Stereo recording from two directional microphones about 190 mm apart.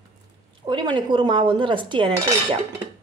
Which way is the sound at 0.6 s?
25° right (ahead or behind).